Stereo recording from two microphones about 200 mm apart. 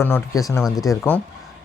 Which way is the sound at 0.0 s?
10° left (ahead or behind).